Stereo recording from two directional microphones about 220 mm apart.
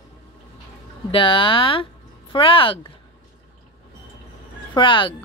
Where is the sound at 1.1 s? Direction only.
25° left (ahead or behind).